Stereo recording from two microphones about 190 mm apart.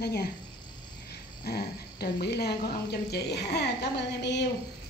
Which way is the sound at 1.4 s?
55° left (ahead or behind).